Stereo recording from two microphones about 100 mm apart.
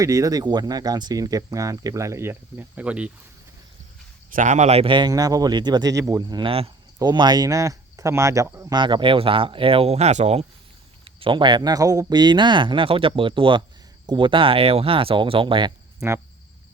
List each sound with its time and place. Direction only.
0.0 s speech: 35° right (ahead or behind); by 3.1 s 10° right (ahead or behind)
4.6 s speech: 85° right
4.9 s speech: 40° right (ahead or behind)
6.4 s speech: 75° right (ahead or behind)
7.0 s speech: 45° right (ahead or behind); by 8.4 s 30° right (ahead or behind)
8.7 s speech: 55° right (ahead or behind); by 10.4 s 90° right
11.0 s speech: 60° right (ahead or behind)
16.0 s speech: 25° right (ahead or behind)